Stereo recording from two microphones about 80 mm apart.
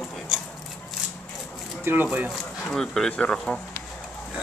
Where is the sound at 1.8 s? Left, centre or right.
Right.